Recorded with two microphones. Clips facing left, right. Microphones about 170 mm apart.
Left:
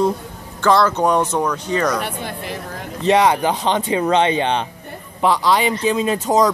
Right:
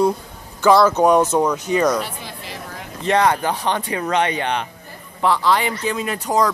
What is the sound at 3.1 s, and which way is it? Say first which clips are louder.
Speech: left 3 dB; 20° left (ahead or behind).